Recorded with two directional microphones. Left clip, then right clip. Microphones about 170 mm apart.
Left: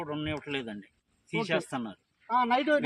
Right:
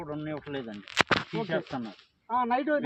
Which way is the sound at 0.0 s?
Centre (ahead or behind).